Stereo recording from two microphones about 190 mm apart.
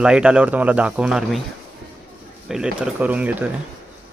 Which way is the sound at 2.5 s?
5° right (ahead or behind).